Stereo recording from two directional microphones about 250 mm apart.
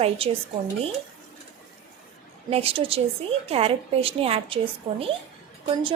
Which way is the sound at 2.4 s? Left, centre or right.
Right.